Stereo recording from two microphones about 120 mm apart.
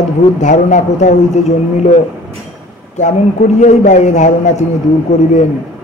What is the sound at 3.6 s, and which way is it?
A man's voice, 90° left.